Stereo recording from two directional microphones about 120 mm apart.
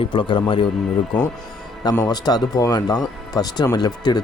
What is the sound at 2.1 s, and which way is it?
Speech, 35° left (ahead or behind).